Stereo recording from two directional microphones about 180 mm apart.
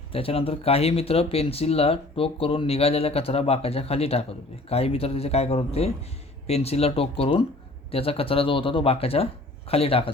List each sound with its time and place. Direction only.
0.1 s speech: 30° left (ahead or behind)